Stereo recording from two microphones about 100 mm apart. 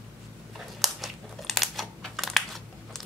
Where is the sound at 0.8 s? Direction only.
Centre (ahead or behind).